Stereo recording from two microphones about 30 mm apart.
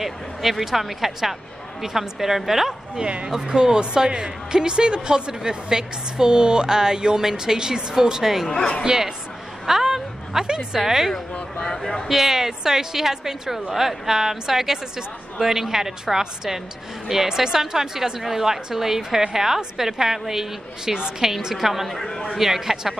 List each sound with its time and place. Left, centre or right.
0.0 s a woman's voice: centre
3.6 s a woman's voice: right
9.7 s a sound: centre
10.4 s speech: right
10.8 s a woman's voice: centre
11.5 s speech: left
11.8 s speech: centre
12.1 s a woman's voice: centre
21.8 s speech: centre
22.3 s a woman's voice: centre